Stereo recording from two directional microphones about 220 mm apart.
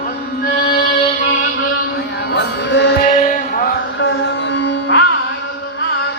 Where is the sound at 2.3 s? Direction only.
50° left (ahead or behind).